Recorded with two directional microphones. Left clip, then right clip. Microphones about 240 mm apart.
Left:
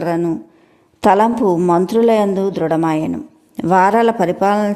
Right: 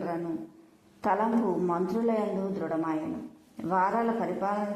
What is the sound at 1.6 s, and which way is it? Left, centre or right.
Speech, left.